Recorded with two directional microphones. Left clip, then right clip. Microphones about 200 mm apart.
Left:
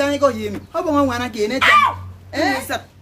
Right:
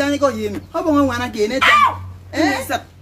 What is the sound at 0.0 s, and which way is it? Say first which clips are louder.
Speech: even; 20° left (ahead or behind).